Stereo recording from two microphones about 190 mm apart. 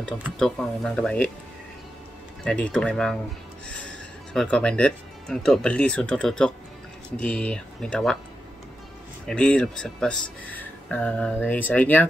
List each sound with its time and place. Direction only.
0.4 s speech: 5° left (ahead or behind)
2.4 s speech: 5° left (ahead or behind)
4.3 s speech: 5° left (ahead or behind)
9.2 s speech: 5° left (ahead or behind)